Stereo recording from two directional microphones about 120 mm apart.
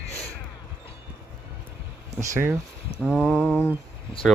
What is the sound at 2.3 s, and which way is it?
Speech, 25° right (ahead or behind).